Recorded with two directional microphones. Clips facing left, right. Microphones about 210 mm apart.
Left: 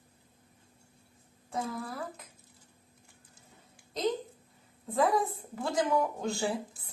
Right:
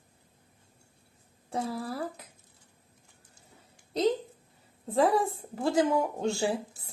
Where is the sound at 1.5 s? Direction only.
30° right (ahead or behind).